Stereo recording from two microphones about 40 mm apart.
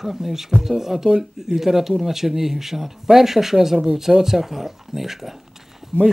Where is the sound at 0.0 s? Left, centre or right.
Centre.